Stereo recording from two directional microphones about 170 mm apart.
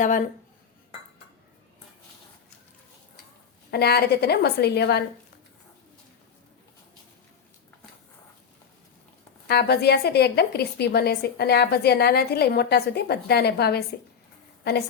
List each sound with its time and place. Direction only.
0.0 s speech: 50° left (ahead or behind)
3.7 s a woman's voice: 70° left (ahead or behind)
9.5 s a woman's voice: 75° left (ahead or behind)